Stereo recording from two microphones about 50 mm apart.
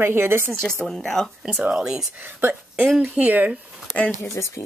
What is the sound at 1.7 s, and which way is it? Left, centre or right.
Speech, centre.